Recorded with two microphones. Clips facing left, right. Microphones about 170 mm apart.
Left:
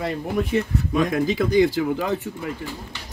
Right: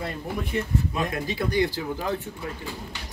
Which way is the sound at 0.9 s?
90° left.